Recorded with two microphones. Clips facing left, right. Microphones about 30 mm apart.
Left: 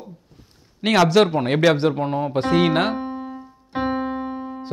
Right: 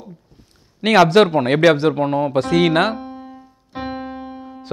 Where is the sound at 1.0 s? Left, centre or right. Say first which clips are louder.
Right 1 dB; right.